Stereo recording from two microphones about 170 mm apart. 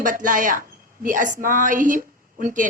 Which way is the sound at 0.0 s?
50° right (ahead or behind).